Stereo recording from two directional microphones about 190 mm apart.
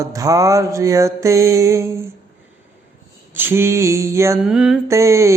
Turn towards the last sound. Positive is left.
turn(degrees=-15)  # may be behind; listen again after turning